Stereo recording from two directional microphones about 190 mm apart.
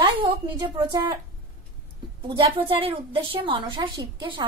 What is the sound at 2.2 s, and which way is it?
A woman's voice, 25° right (ahead or behind).